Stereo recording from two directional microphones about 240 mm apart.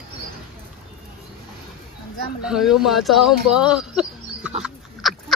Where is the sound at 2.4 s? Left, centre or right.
Centre.